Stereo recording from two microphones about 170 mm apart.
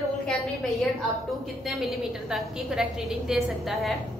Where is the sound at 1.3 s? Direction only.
Centre (ahead or behind).